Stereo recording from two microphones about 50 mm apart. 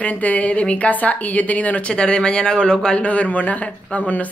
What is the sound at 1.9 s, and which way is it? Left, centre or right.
Speech, centre.